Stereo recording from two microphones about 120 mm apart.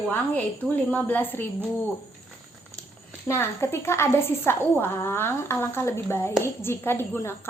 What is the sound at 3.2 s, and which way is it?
Speech, 20° left (ahead or behind).